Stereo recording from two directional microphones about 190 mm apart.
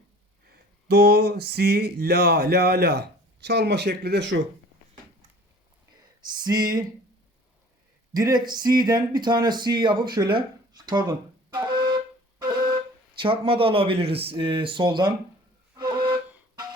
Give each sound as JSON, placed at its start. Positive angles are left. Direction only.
{"t": 0.5, "sound": "speech", "side_deg": -60}
{"t": 6.4, "sound": "speech", "side_deg": -20}
{"t": 8.1, "sound": "speech", "side_deg": -20}
{"t": 10.2, "sound": "flute", "side_deg": -25}
{"t": 13.1, "sound": "speech", "side_deg": -25}
{"t": 15.7, "sound": "flute", "side_deg": -25}